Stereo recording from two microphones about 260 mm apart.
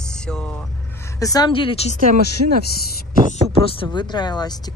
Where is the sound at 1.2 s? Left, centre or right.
Centre.